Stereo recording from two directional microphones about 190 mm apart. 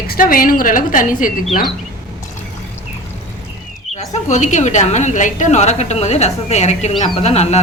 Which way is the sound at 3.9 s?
35° left (ahead or behind).